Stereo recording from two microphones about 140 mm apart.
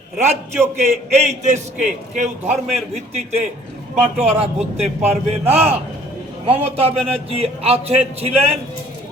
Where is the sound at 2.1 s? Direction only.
55° right (ahead or behind).